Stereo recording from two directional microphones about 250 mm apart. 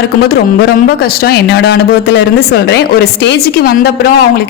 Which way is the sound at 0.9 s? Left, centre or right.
Left.